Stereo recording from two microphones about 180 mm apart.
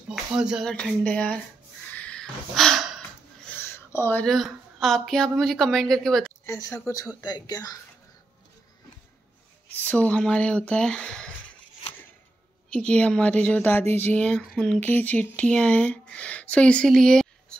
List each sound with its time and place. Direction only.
0.1 s speech: 5° right (ahead or behind)
2.0 s a sound: 5° left (ahead or behind)
3.4 s a woman's voice: 10° left (ahead or behind)
6.4 s speech: 15° left (ahead or behind)
9.7 s speech: 10° left (ahead or behind)
12.6 s speech: 5° left (ahead or behind)